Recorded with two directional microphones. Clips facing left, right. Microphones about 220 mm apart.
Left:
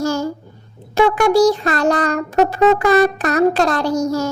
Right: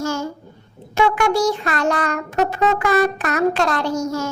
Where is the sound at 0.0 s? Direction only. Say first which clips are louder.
Left 4 dB; 35° left (ahead or behind).